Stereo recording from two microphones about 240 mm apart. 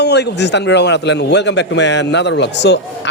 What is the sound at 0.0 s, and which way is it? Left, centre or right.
A man's voice, left.